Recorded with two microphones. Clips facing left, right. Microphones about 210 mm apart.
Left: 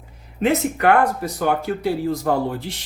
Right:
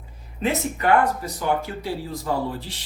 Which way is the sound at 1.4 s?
60° left (ahead or behind).